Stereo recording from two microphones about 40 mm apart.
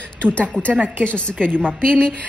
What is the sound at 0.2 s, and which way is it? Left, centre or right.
A woman's voice, left.